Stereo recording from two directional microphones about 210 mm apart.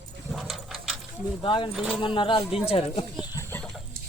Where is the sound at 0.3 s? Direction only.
Centre (ahead or behind).